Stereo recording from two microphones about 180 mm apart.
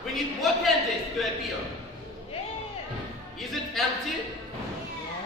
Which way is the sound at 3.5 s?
Centre (ahead or behind).